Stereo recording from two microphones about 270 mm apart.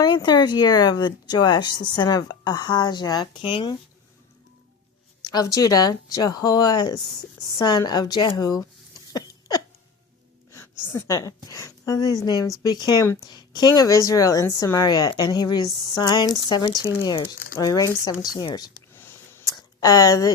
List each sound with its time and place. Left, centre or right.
0.0 s a woman's voice: centre
5.3 s a woman's voice: centre
9.1 s a sound: centre
10.5 s a woman's voice: centre
18.3 s a sound: centre
19.8 s a woman's voice: centre